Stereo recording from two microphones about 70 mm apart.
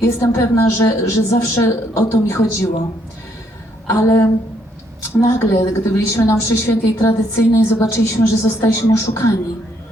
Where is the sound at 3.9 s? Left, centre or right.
Left.